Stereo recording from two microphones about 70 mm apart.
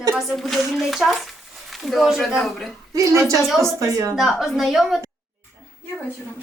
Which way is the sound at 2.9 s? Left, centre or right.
Right.